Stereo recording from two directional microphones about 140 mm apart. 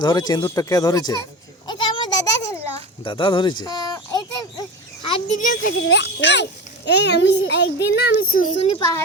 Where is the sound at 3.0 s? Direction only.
35° left (ahead or behind).